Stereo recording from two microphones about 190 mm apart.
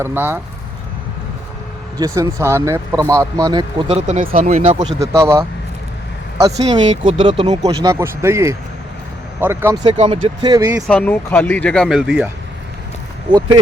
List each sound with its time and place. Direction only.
0.0 s speech: 10° right (ahead or behind)
2.0 s speech: 15° right (ahead or behind); by 4.8 s 35° right (ahead or behind)
4.9 s speech: 15° right (ahead or behind)
6.7 s speech: 25° right (ahead or behind)
10.0 s speech: 35° right (ahead or behind)
10.4 s speech: 20° right (ahead or behind)
10.8 s speech: 10° left (ahead or behind)